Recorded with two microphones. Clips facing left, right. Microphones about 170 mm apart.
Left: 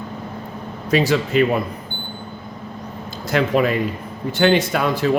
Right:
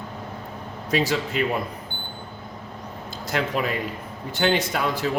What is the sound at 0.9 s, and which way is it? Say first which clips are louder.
Speech: left 6 dB; 70° left (ahead or behind).